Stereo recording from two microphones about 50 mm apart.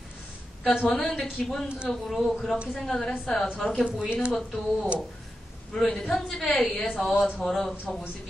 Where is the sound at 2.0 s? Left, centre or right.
Centre.